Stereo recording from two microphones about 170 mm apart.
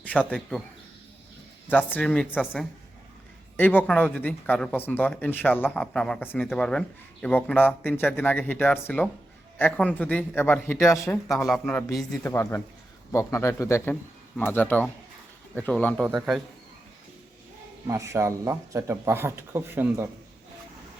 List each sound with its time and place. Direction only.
0.0 s a man's voice: 10° left (ahead or behind)
1.7 s speech: 10° left (ahead or behind)
11.3 s speech: centre (ahead or behind)
17.8 s speech: 20° right (ahead or behind)